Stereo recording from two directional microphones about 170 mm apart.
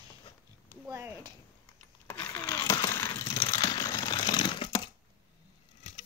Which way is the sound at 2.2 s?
20° left (ahead or behind).